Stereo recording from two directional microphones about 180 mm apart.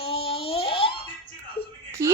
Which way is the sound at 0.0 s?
30° left (ahead or behind).